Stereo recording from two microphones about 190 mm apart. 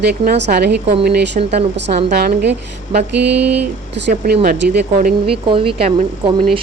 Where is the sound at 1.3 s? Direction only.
35° right (ahead or behind).